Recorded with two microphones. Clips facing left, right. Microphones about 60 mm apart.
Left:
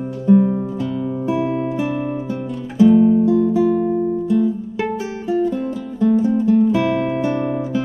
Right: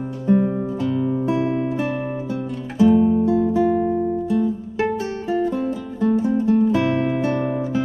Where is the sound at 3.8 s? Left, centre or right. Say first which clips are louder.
Left 2 dB; centre.